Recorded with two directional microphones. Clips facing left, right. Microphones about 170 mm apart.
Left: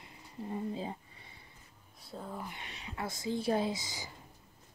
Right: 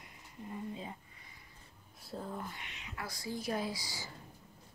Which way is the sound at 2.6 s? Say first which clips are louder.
Left 5 dB; 35° left (ahead or behind).